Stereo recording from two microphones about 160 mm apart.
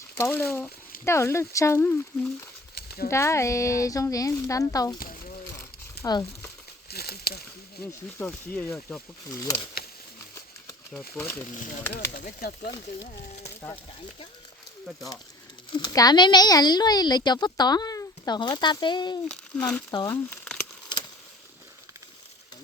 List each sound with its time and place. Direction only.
0.2 s speech: 15° left (ahead or behind)
2.7 s a sound: 75° left (ahead or behind)
3.1 s speech: 15° left (ahead or behind)
6.0 s speech: 25° left (ahead or behind)
6.9 s a sound: 75° left (ahead or behind)
8.2 s speech: 15° left (ahead or behind)
11.2 s speech: 10° left (ahead or behind)
11.5 s speech: 50° left (ahead or behind); by 12.7 s 70° left (ahead or behind)
15.7 s speech: 25° left (ahead or behind)
19.5 s speech: 5° left (ahead or behind)
19.9 s speech: 25° left (ahead or behind)
20.3 s crumpling: 5° left (ahead or behind)